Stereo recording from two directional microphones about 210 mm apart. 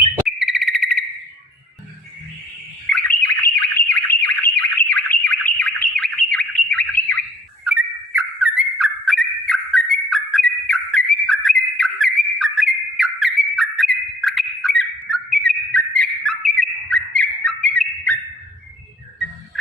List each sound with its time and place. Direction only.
0.3 s cricket: centre (ahead or behind)
2.9 s bird: 10° left (ahead or behind)
7.6 s bird: 5° right (ahead or behind)